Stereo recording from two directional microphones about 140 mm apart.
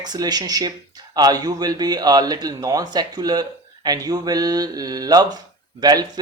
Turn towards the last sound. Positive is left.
turn(degrees=-30)  # may be behind; listen again after turning